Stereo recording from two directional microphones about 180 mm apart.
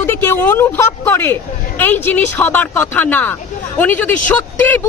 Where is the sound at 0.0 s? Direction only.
15° left (ahead or behind).